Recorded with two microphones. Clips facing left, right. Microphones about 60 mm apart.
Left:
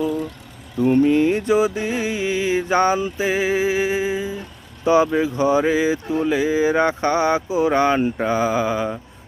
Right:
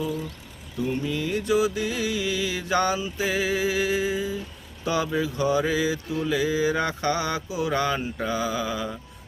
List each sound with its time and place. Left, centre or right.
0.9 s mantra: left
3.2 s speech: left